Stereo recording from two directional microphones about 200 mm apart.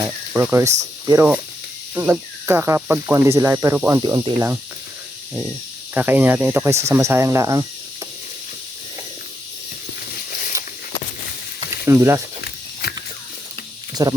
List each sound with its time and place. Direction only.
0.3 s speech: 10° right (ahead or behind)
5.9 s speech: 10° right (ahead or behind)
11.9 s speech: 15° right (ahead or behind)
13.9 s speech: 20° right (ahead or behind)